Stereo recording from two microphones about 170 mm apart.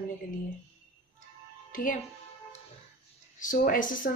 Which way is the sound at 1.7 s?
55° left (ahead or behind).